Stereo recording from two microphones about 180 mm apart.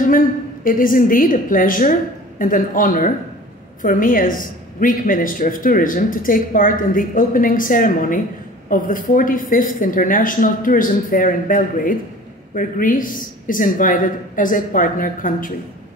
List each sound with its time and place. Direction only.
0.7 s a woman's voice: 50° left (ahead or behind)